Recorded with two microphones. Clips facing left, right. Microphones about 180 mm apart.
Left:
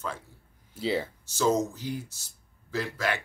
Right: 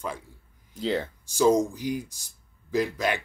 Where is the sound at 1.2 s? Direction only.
10° right (ahead or behind).